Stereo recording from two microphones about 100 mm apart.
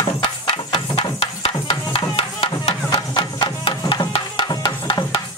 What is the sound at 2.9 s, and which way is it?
Music, 45° left (ahead or behind).